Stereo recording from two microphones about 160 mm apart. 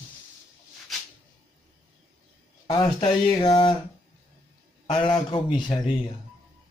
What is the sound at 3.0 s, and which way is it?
Speech, 35° left (ahead or behind).